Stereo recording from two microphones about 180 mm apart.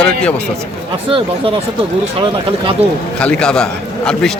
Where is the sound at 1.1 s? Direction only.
30° right (ahead or behind).